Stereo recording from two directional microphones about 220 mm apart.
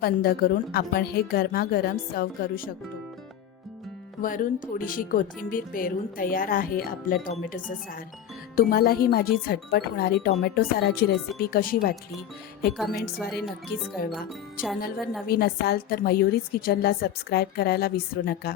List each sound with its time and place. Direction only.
0.0 s a woman's voice: 45° left (ahead or behind)
4.2 s a woman's voice: 40° left (ahead or behind)
13.1 s speech: centre (ahead or behind)
14.0 s a woman's voice: 45° left (ahead or behind)
15.3 s a woman's voice: 45° left (ahead or behind)